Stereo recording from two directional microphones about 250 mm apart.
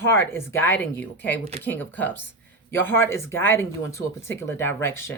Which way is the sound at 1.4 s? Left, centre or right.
Right.